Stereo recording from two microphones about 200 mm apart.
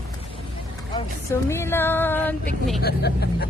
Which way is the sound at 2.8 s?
50° left (ahead or behind).